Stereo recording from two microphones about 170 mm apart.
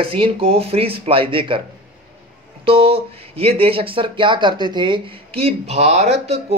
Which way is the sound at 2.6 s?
35° right (ahead or behind).